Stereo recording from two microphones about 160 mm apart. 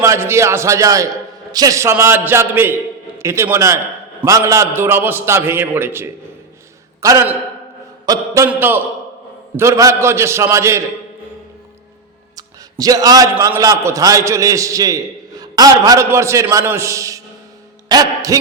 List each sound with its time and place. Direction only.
0.0 s a man's voice: 15° right (ahead or behind)
12.4 s a sound: 25° right (ahead or behind)
13.6 s a man's voice: 20° right (ahead or behind)